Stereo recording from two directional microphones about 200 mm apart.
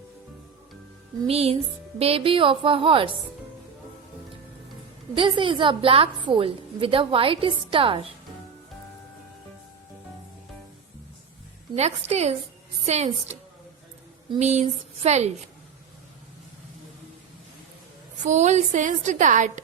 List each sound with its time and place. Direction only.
1.3 s a woman's voice: 30° right (ahead or behind)
5.1 s a woman's voice: 25° right (ahead or behind)
11.7 s a woman's voice: 35° right (ahead or behind)
18.2 s a woman's voice: 35° right (ahead or behind)